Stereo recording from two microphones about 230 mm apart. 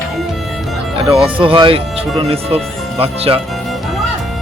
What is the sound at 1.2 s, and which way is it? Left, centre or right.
Speech, right.